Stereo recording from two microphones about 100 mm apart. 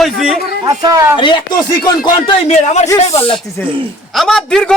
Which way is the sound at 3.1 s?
75° left (ahead or behind).